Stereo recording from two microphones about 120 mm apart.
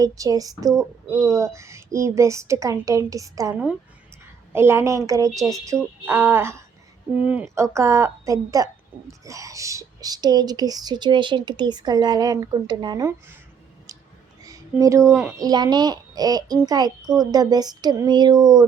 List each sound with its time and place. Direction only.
0.0 s speech: 30° right (ahead or behind)
3.5 s speech: 10° right (ahead or behind)
4.5 s speech: 20° right (ahead or behind)
7.5 s speech: 25° right (ahead or behind)
14.4 s a sound: 30° right (ahead or behind)
15.4 s speech: 35° right (ahead or behind)